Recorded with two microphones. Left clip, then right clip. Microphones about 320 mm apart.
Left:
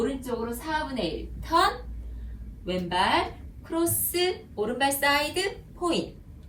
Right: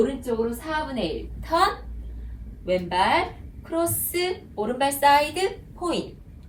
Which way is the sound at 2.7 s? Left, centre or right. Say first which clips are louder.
Right 4 dB; centre.